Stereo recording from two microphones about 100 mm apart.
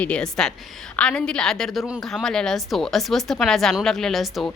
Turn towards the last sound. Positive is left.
turn(degrees=0)  # may be behind; listen again after turning